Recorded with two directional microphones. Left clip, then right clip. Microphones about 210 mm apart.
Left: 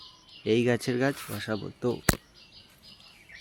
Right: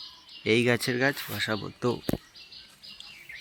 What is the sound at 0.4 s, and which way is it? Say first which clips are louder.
Speech: right 1 dB; 10° left (ahead or behind).